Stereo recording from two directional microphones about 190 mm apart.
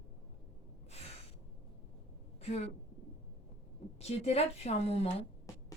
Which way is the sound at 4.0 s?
35° left (ahead or behind).